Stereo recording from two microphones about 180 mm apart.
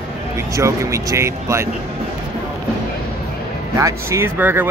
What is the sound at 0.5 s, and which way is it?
Speech, 15° right (ahead or behind).